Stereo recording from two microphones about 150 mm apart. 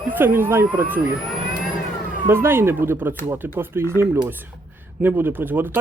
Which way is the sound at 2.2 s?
15° right (ahead or behind).